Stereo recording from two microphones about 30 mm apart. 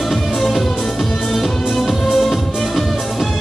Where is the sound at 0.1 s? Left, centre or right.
Centre.